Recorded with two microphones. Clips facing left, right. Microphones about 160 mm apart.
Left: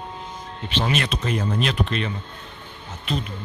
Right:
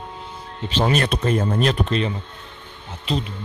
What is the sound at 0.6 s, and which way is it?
Speech, 40° right (ahead or behind).